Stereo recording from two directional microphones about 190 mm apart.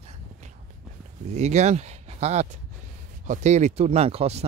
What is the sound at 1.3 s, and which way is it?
Speech, 35° right (ahead or behind).